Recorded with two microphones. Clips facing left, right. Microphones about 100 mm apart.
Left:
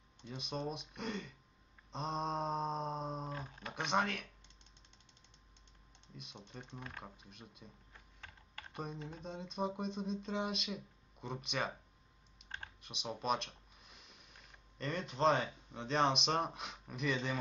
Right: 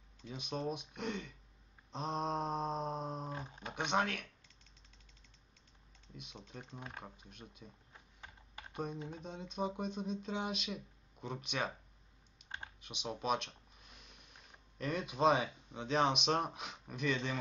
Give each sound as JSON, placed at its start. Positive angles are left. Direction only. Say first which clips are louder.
{"t": 0.2, "sound": "speech", "louder": "right 1 dB", "side_deg": 0}
{"t": 3.4, "sound": "speech", "louder": "right 1 dB", "side_deg": -20}
{"t": 3.7, "sound": "speech", "louder": "even", "side_deg": 0}
{"t": 6.1, "sound": "speech", "louder": "right 1 dB", "side_deg": 0}
{"t": 8.2, "sound": "typing", "louder": "right 1 dB", "side_deg": -15}
{"t": 8.7, "sound": "speech", "louder": "right 3 dB", "side_deg": 0}
{"t": 12.8, "sound": "speech", "louder": "even", "side_deg": 0}